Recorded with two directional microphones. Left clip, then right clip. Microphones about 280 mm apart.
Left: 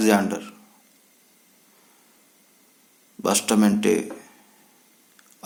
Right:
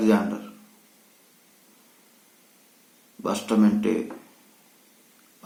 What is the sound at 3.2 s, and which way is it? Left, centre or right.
Speech, left.